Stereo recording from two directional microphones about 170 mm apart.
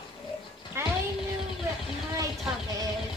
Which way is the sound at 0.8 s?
15° right (ahead or behind).